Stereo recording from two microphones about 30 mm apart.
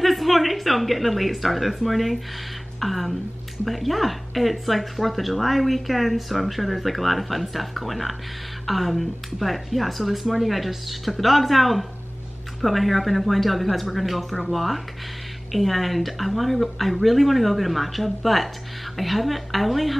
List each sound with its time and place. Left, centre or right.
0.0 s speech: centre